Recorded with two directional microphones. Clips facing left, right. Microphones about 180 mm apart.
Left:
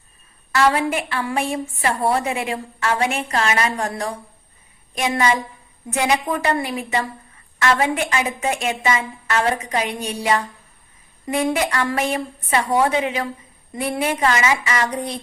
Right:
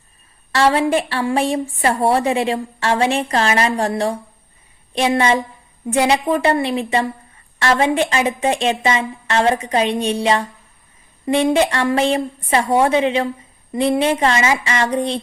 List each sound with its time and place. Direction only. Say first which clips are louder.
0.5 s a woman's voice: right 3 dB; 30° right (ahead or behind)